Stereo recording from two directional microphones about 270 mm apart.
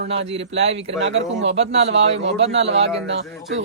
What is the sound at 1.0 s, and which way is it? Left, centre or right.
A man's voice, right.